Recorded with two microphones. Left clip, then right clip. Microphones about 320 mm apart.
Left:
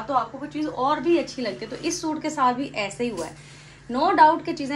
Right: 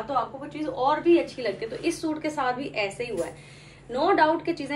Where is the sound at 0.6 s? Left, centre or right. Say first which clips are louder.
Left 1 dB; left.